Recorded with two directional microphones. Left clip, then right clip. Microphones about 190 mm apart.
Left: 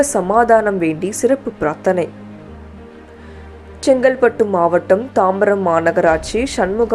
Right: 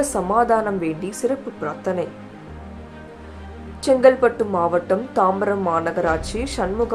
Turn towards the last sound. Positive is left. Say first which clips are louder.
# left 6 dB
turn(degrees=20)  # may be behind; listen again after turning